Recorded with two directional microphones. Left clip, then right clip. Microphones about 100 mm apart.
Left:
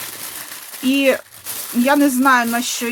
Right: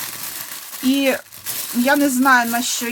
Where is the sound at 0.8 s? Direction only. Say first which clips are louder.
Left 2 dB; 20° left (ahead or behind).